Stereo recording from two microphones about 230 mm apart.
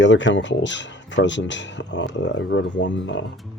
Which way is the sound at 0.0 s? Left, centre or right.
Left.